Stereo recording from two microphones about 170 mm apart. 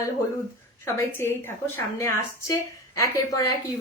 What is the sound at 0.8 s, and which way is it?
A woman's voice, 15° left (ahead or behind).